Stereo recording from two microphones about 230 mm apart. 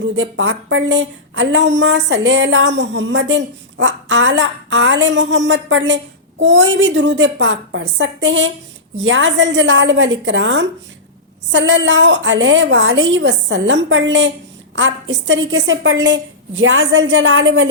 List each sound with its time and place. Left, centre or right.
0.0 s a woman's voice: right